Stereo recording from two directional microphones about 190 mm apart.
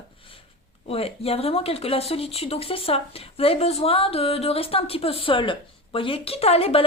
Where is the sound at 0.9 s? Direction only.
30° left (ahead or behind).